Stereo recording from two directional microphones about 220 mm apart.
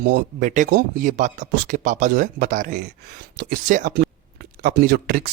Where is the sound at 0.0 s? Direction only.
40° right (ahead or behind).